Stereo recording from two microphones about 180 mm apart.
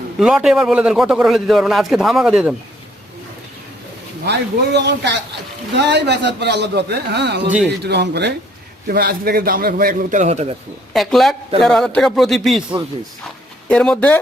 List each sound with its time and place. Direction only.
0.2 s a man's voice: 5° right (ahead or behind)
4.3 s a man's voice: 70° right (ahead or behind)
8.9 s a man's voice: 55° right (ahead or behind); by 10.5 s 40° right (ahead or behind)
10.9 s a man's voice: centre (ahead or behind)
13.7 s speech: 5° left (ahead or behind)